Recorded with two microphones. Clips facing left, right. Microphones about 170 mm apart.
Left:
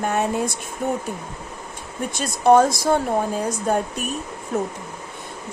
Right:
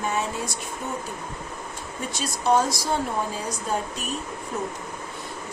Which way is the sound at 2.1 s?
55° left (ahead or behind).